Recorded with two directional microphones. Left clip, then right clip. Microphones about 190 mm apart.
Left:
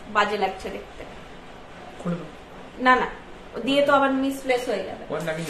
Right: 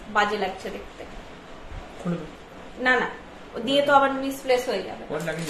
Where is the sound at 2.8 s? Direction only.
15° left (ahead or behind).